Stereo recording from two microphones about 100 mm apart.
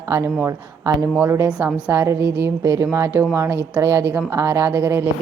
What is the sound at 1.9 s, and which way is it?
A woman's voice, 20° right (ahead or behind).